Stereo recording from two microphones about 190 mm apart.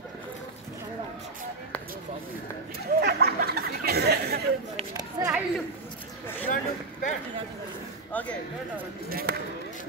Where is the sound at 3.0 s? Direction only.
55° right (ahead or behind).